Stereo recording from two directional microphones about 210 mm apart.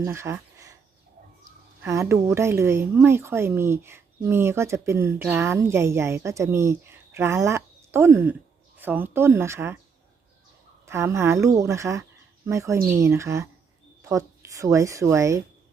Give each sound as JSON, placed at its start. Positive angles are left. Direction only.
{"t": 0.0, "sound": "a sound", "side_deg": -10}
{"t": 1.8, "sound": "a woman's voice", "side_deg": -15}
{"t": 10.8, "sound": "a woman's voice", "side_deg": -15}